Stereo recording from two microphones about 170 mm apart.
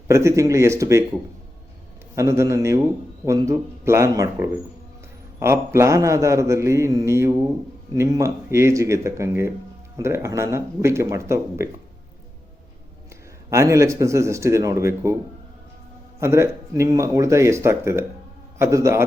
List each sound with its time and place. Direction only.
0.1 s speech: 15° right (ahead or behind)
2.1 s speech: 15° right (ahead or behind)
13.5 s speech: 15° right (ahead or behind)
16.2 s speech: 15° right (ahead or behind)